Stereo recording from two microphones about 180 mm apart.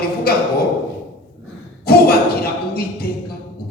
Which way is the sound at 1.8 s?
60° left (ahead or behind).